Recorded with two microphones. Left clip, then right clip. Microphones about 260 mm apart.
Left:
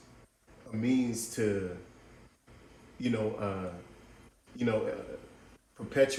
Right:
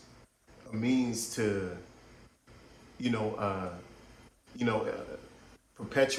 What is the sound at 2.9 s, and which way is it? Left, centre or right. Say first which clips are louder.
Speech: even; right.